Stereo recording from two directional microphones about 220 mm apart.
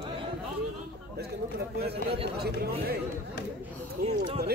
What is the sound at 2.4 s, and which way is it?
Chatter, 45° right (ahead or behind).